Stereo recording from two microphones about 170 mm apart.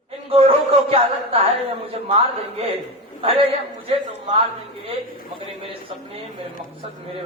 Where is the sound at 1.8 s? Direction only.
35° right (ahead or behind).